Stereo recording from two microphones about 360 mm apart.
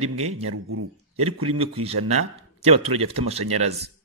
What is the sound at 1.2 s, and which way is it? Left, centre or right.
A man's voice, centre.